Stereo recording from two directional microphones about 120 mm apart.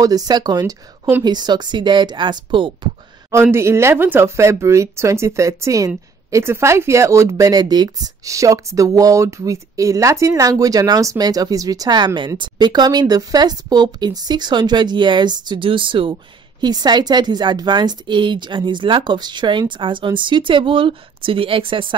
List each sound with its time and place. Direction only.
0.0 s speech: 35° right (ahead or behind)
3.5 s speech: 20° right (ahead or behind); by 21.9 s 45° right (ahead or behind)